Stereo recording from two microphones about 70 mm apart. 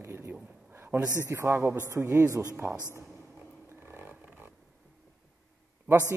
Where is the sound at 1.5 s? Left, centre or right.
Right.